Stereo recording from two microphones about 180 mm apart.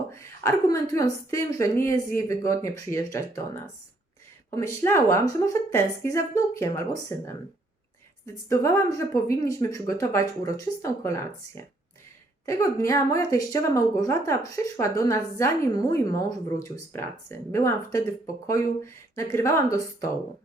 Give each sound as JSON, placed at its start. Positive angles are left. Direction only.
{"t": 0.1, "sound": "speech", "side_deg": 15}
{"t": 8.4, "sound": "speech", "side_deg": 15}